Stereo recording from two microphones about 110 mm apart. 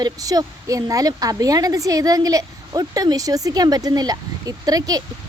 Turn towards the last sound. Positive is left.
turn(degrees=-35)  # may be behind; listen again after turning